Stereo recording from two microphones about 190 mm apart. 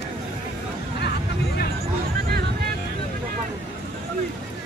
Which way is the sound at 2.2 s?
55° right (ahead or behind).